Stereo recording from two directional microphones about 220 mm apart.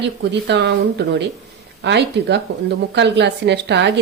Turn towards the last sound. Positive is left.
turn(degrees=-50)  # may be behind; listen again after turning